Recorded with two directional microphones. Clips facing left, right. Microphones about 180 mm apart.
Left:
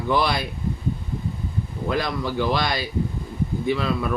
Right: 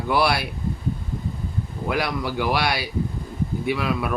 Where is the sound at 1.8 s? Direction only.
10° right (ahead or behind).